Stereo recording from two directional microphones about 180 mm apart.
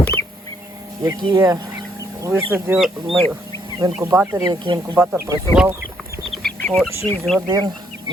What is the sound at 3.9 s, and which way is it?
Speech, 10° right (ahead or behind).